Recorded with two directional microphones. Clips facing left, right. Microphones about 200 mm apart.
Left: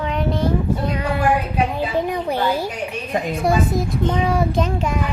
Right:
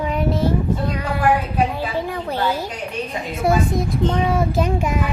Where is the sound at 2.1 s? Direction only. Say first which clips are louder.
Left 2 dB; 15° left (ahead or behind).